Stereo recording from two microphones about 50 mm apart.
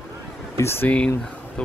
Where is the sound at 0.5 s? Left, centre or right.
Left.